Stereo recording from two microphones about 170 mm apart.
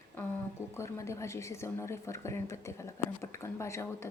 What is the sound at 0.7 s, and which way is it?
A woman's voice, 15° left (ahead or behind).